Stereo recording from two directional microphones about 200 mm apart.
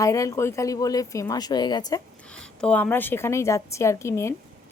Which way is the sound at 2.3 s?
5° left (ahead or behind).